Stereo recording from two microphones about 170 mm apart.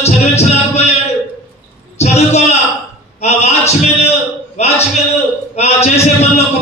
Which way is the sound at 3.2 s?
40° left (ahead or behind).